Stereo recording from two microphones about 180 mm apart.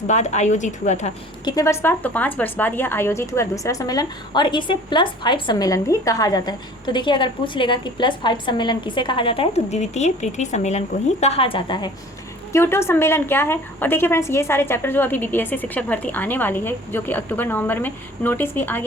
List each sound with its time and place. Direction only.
0.1 s a woman's voice: 40° left (ahead or behind)
1.5 s speech: 15° left (ahead or behind)
12.5 s a woman's voice: 15° left (ahead or behind)